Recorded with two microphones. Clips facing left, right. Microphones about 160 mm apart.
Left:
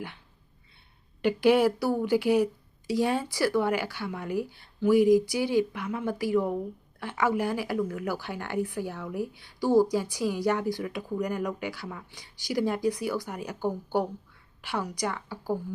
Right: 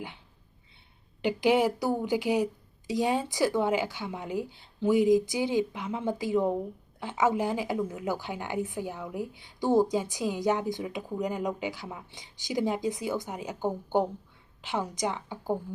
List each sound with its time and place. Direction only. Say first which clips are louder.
1.2 s a woman's voice: left 3 dB; 15° right (ahead or behind)